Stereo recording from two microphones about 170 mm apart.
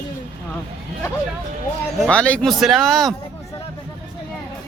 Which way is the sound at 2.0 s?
5° left (ahead or behind).